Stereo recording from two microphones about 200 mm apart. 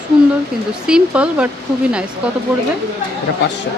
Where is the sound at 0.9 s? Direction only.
5° right (ahead or behind).